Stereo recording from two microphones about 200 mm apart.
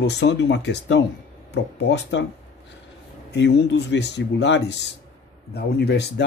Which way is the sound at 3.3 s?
60° left (ahead or behind).